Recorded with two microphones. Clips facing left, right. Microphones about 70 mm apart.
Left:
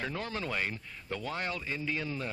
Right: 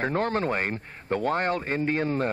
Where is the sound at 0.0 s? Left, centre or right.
Right.